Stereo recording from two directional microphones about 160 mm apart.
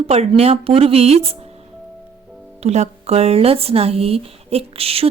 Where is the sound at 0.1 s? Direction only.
40° right (ahead or behind).